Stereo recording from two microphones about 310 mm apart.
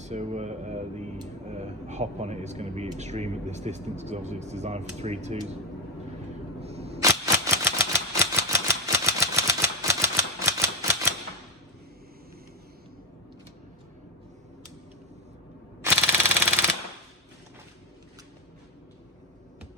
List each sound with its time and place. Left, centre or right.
0.0 s speech: right
6.6 s a sound: centre
15.8 s machine gun: centre